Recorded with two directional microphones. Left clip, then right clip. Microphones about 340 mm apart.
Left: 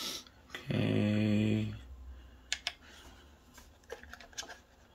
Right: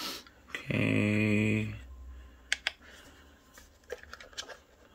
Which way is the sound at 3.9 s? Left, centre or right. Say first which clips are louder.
Right 4 dB; centre.